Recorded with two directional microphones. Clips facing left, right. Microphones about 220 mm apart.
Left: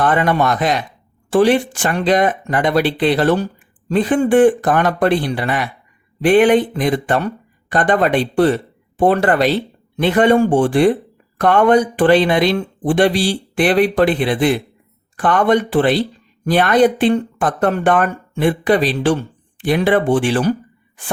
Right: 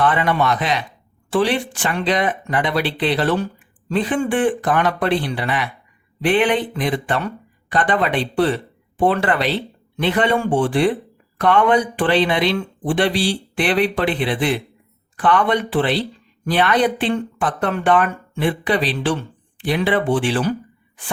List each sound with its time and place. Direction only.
0.0 s speech: 45° left (ahead or behind)